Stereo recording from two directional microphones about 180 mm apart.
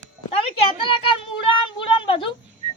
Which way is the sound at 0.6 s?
30° left (ahead or behind).